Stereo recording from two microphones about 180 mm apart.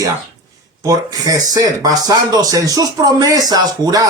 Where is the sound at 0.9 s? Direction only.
20° right (ahead or behind).